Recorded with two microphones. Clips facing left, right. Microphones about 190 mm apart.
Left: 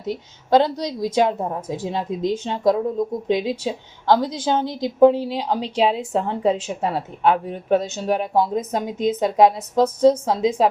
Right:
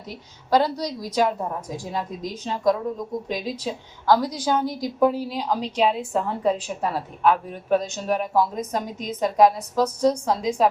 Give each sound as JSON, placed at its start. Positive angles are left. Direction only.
{"t": 0.1, "sound": "a woman's voice", "side_deg": 25}